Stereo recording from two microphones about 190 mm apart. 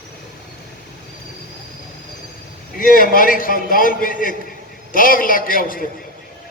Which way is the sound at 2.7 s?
45° left (ahead or behind).